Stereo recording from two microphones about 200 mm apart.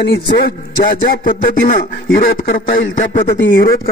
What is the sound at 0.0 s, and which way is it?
A man's voice, 60° left (ahead or behind).